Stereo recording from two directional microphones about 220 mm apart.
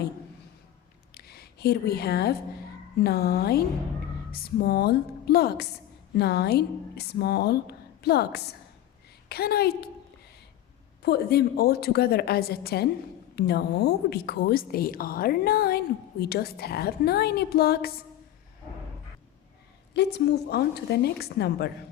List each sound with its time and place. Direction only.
1.1 s a sound: 45° left (ahead or behind)
3.0 s a woman's voice: 45° left (ahead or behind)
11.0 s a woman's voice: 45° left (ahead or behind)
19.9 s a woman's voice: 50° left (ahead or behind)